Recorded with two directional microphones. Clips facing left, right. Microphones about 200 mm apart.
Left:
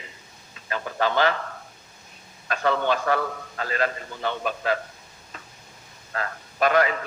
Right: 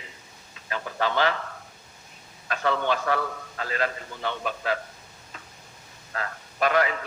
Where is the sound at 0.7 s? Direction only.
45° left (ahead or behind).